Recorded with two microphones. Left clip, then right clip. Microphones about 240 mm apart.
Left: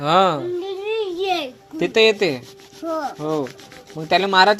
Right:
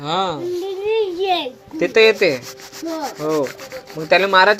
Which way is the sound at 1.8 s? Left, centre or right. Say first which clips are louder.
Right 3 dB; left.